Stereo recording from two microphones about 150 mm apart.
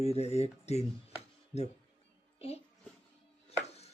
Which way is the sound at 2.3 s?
40° left (ahead or behind).